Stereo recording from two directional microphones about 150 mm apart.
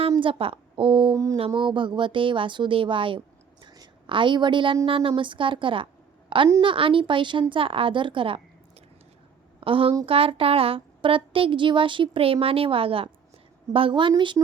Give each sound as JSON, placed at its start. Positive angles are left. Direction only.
{"t": 0.2, "sound": "a woman's voice", "side_deg": -35}
{"t": 1.1, "sound": "a sound", "side_deg": -20}
{"t": 1.5, "sound": "a woman's voice", "side_deg": -35}
{"t": 3.6, "sound": "a sound", "side_deg": -30}
{"t": 4.9, "sound": "a woman's voice", "side_deg": -35}
{"t": 9.6, "sound": "a woman's voice", "side_deg": -35}